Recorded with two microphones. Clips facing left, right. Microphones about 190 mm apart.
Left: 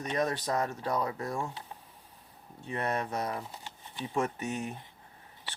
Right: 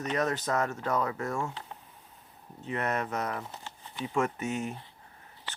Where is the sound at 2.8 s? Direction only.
30° left (ahead or behind).